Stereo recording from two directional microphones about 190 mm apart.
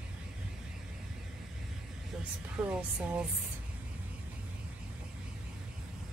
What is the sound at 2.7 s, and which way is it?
Speech, 5° right (ahead or behind).